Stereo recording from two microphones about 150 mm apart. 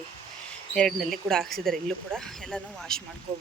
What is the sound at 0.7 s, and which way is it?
Speech, 5° left (ahead or behind).